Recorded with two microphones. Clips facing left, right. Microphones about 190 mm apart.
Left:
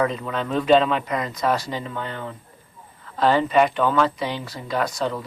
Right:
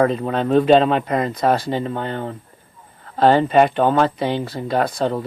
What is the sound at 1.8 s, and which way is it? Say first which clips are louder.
Speech: right 6 dB; 45° right (ahead or behind).